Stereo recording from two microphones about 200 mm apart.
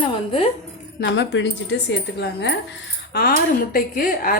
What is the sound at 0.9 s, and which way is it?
Speech, 60° left (ahead or behind).